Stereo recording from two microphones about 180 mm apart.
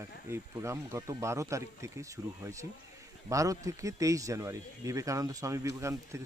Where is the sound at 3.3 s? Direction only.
20° right (ahead or behind).